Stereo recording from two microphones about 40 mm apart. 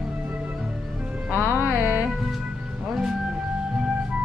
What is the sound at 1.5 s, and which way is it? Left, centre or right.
Music, right.